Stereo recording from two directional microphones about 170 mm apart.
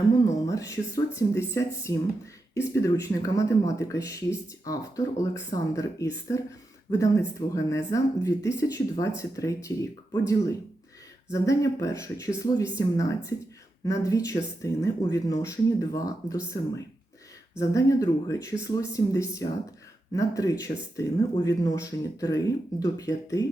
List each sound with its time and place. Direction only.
0.3 s speech: 20° left (ahead or behind)